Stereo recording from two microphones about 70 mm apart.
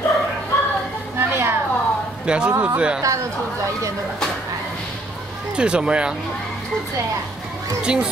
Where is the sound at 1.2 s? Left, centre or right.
Right.